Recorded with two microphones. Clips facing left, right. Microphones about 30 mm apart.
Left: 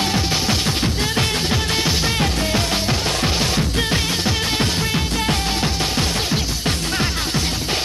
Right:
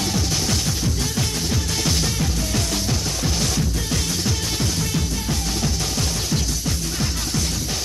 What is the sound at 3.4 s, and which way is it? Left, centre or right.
Music, left.